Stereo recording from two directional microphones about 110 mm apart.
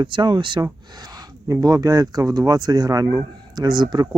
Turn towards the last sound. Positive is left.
turn(degrees=-40)  # may be behind; listen again after turning